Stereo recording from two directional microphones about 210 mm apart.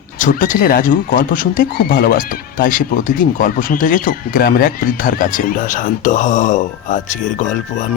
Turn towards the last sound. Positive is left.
turn(degrees=35)  # may be behind; listen again after turning